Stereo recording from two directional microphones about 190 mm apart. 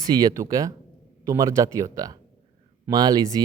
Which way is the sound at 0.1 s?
20° right (ahead or behind).